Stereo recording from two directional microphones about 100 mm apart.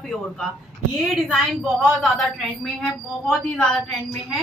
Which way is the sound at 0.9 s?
Centre (ahead or behind).